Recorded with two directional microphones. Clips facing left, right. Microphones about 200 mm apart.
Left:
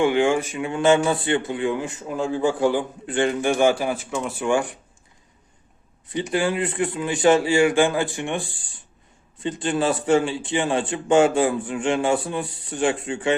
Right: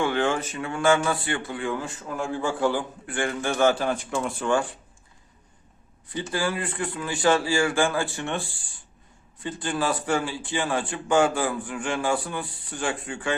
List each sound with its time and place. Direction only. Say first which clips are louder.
0.0 s a man's voice: left 5 dB; 15° left (ahead or behind)
4.4 s a man's voice: left 4 dB; 15° left (ahead or behind)
6.1 s a man's voice: left 5 dB; 20° left (ahead or behind)